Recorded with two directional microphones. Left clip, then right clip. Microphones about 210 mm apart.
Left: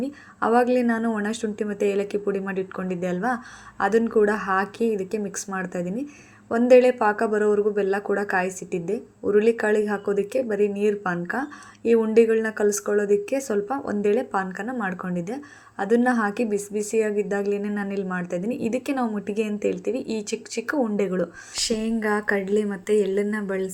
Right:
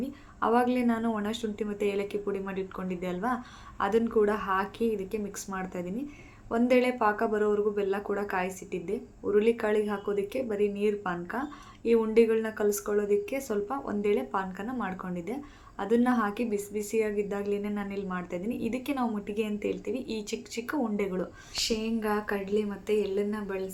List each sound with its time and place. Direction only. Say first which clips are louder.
0.0 s speech: left 5 dB; 25° left (ahead or behind)